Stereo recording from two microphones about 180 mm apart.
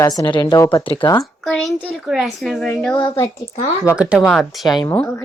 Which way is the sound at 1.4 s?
Centre (ahead or behind).